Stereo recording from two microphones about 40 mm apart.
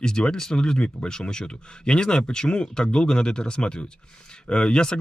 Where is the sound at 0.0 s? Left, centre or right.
Centre.